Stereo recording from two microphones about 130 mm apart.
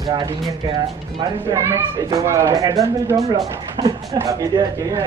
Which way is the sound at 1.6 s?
20° right (ahead or behind).